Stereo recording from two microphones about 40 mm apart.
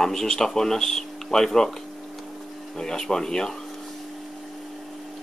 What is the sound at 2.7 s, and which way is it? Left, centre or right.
Speech, centre.